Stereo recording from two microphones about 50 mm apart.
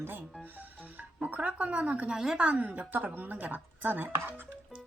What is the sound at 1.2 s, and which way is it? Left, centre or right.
A woman's voice, right.